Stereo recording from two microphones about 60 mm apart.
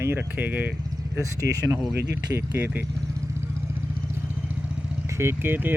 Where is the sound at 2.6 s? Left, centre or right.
Right.